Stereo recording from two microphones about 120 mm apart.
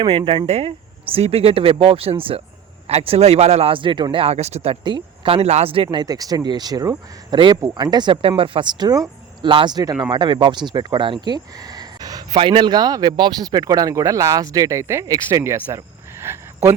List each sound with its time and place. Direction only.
0.0 s a man's voice: 45° right (ahead or behind)
0.4 s a man's voice: 65° right (ahead or behind); by 8.9 s 45° right (ahead or behind)
8.9 s a sound: 30° right (ahead or behind)
9.5 s speech: 40° right (ahead or behind)
12.4 s speech: 45° right (ahead or behind); by 15.8 s 20° right (ahead or behind)
16.2 s cricket: 20° right (ahead or behind)